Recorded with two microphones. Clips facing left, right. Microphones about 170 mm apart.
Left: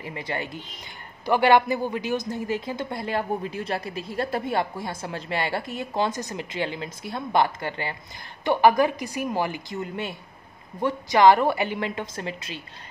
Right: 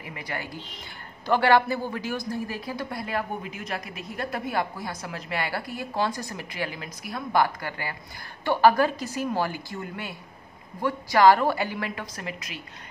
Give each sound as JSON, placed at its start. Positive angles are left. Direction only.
{"t": 0.0, "sound": "a woman's voice", "side_deg": 25}